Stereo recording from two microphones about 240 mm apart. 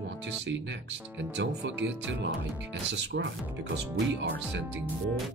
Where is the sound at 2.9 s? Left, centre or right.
Right.